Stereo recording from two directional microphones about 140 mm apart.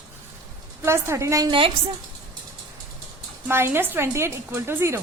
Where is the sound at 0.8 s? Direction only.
20° right (ahead or behind).